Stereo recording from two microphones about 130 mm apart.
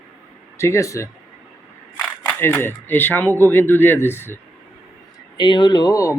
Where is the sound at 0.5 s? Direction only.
20° left (ahead or behind).